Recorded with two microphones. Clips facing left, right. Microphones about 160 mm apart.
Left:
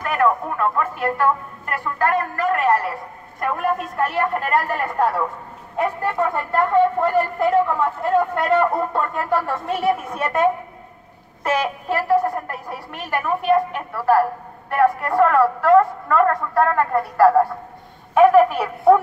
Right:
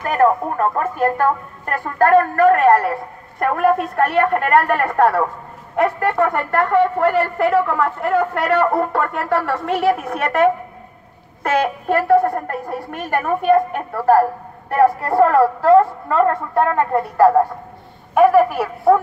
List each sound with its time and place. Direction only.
0.0 s a woman's voice: 35° right (ahead or behind); by 17.3 s 20° right (ahead or behind)
18.1 s a woman's voice: 10° right (ahead or behind)